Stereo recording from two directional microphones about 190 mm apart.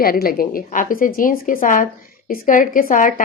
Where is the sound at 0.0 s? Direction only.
50° left (ahead or behind).